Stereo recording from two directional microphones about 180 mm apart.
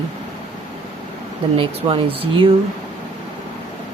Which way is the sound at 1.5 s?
30° right (ahead or behind).